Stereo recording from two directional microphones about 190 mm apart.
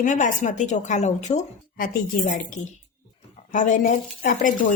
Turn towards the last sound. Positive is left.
turn(degrees=45)  # may be behind; listen again after turning